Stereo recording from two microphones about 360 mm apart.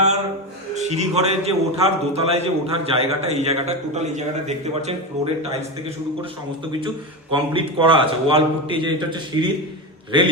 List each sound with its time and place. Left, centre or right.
0.8 s a man's voice: centre
6.7 s a man's voice: centre